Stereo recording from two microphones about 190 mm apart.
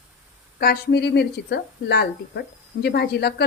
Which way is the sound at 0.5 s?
55° left (ahead or behind).